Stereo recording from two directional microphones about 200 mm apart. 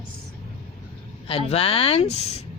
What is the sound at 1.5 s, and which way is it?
Speech, 30° left (ahead or behind).